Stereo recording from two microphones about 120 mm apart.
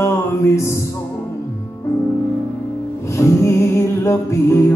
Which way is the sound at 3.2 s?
20° left (ahead or behind).